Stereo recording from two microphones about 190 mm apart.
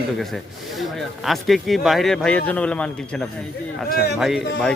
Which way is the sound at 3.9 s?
60° left (ahead or behind).